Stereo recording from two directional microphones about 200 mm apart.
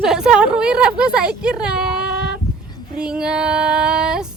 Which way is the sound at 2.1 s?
55° right (ahead or behind).